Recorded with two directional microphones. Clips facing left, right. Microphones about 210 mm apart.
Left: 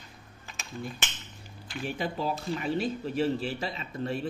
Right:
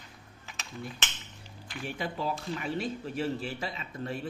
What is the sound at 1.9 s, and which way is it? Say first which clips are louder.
Speech: left 2 dB; 30° left (ahead or behind).